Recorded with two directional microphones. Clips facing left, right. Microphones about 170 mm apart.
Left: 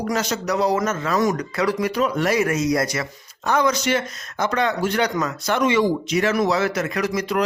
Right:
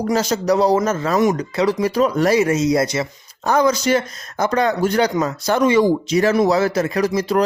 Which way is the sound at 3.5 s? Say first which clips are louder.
Right 4 dB; 35° right (ahead or behind).